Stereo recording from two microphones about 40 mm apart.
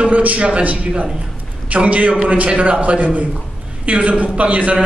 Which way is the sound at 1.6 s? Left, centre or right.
Right.